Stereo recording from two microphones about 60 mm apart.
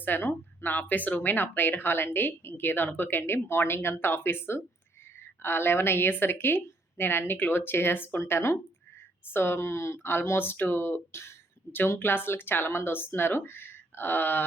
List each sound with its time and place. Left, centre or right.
0.0 s speech: left
8.2 s speech: left